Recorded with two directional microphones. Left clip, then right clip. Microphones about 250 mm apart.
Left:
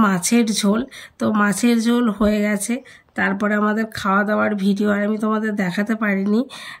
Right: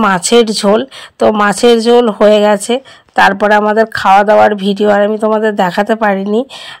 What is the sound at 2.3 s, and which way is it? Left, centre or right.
Speech, right.